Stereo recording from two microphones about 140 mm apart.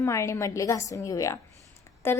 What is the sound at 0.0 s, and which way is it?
A woman's voice, 20° left (ahead or behind).